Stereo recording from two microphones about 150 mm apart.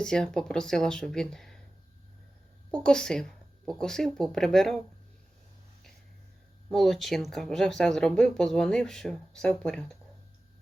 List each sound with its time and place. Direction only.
0.0 s speech: 5° left (ahead or behind)
2.8 s speech: 5° left (ahead or behind)
6.7 s speech: centre (ahead or behind)